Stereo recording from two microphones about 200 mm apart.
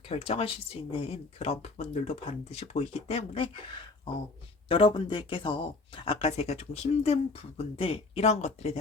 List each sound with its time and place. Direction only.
0.1 s speech: 30° left (ahead or behind)